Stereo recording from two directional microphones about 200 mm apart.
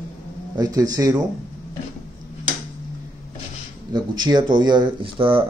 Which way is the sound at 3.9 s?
20° right (ahead or behind).